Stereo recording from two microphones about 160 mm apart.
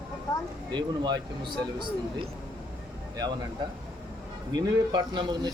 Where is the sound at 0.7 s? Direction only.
30° right (ahead or behind).